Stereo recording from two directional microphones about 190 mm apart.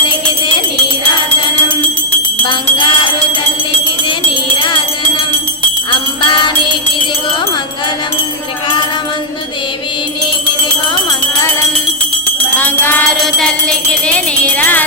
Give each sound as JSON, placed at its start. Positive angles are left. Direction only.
{"t": 2.4, "sound": "jingle bell", "side_deg": 25}
{"t": 4.5, "sound": "music", "side_deg": 25}
{"t": 12.5, "sound": "music", "side_deg": 10}